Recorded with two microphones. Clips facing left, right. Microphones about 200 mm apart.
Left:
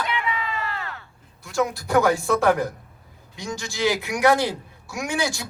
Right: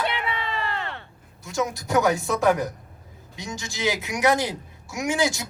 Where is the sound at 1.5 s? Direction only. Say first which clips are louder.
Left 2 dB; 20° right (ahead or behind).